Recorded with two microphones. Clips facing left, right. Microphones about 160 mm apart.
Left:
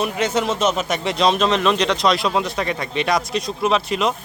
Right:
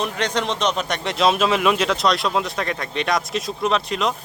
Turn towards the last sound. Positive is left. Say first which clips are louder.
# left 2 dB
turn(degrees=0)  # may be behind; listen again after turning